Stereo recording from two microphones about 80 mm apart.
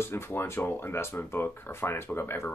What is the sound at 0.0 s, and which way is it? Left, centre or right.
Speech, left.